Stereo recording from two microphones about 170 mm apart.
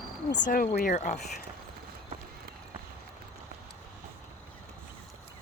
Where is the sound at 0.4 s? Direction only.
55° left (ahead or behind).